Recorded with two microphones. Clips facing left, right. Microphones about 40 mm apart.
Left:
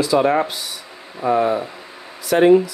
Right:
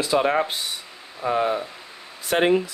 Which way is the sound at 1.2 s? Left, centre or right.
Centre.